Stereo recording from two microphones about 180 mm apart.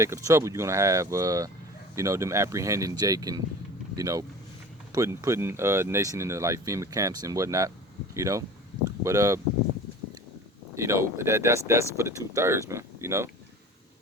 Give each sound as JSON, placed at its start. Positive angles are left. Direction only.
{"t": 0.0, "sound": "speech", "side_deg": -15}
{"t": 10.8, "sound": "speech", "side_deg": -15}